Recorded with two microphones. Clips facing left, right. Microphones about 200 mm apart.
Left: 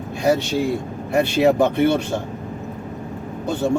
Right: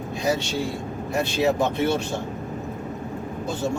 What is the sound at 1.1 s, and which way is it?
Speech, 60° left (ahead or behind).